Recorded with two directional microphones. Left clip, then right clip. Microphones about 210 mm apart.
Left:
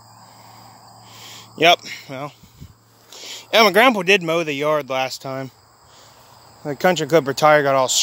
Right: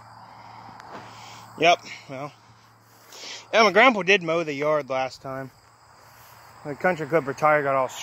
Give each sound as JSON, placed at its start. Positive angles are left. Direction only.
{"t": 0.4, "sound": "a sound", "side_deg": 20}
{"t": 1.5, "sound": "speech", "side_deg": 25}
{"t": 5.2, "sound": "cricket", "side_deg": 35}
{"t": 6.6, "sound": "speech", "side_deg": 40}